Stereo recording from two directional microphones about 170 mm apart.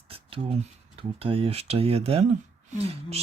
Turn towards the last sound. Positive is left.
turn(degrees=-35)  # may be behind; listen again after turning